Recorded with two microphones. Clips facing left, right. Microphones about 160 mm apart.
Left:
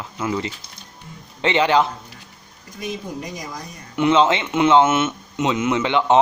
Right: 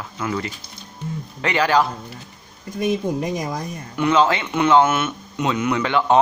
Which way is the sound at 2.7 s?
55° right (ahead or behind).